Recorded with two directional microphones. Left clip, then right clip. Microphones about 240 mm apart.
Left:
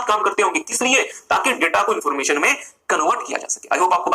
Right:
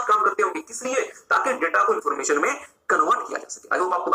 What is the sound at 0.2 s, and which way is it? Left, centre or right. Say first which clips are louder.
Speech: left 3 dB; left.